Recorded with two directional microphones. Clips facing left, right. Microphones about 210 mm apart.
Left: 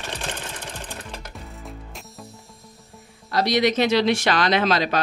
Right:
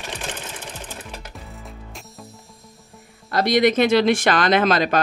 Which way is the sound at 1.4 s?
Centre (ahead or behind).